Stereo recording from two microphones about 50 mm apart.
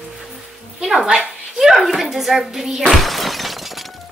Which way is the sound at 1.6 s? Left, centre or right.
Centre.